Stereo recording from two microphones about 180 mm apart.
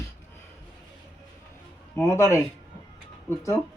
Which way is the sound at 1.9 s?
15° left (ahead or behind).